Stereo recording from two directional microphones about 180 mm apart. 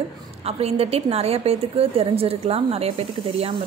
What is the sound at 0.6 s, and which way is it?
A woman's voice, 35° right (ahead or behind).